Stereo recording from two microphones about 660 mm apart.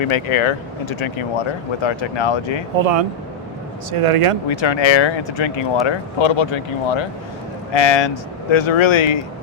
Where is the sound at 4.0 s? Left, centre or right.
Right.